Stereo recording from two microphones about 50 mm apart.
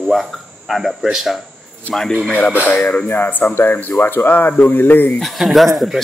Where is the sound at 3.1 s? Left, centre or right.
Left.